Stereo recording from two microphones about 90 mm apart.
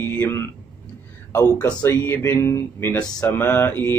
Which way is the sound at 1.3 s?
35° left (ahead or behind).